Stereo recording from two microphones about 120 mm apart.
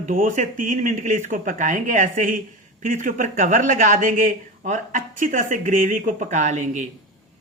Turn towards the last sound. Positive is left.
turn(degrees=-90)